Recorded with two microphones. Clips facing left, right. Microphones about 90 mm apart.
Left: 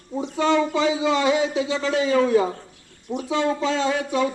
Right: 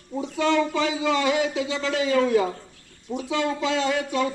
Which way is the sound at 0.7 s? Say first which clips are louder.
Left 3 dB; 20° left (ahead or behind).